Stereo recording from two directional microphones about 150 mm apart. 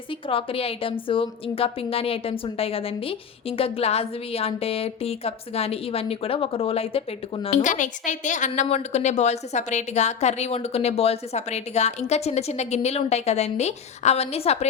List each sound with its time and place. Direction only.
0.3 s speech: 40° left (ahead or behind)
7.6 s a woman's voice: 60° left (ahead or behind)